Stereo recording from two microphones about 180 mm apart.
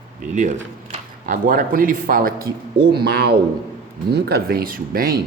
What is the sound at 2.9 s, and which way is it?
Speech, 65° right (ahead or behind).